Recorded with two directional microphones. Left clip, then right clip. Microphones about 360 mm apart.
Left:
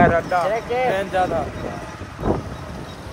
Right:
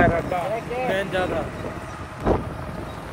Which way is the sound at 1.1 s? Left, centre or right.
Centre.